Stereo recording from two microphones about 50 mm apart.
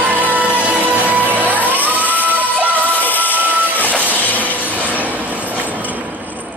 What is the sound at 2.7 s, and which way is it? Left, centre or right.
Music, left.